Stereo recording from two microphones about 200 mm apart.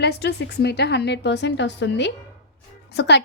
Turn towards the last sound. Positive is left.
turn(degrees=55)  # may be behind; listen again after turning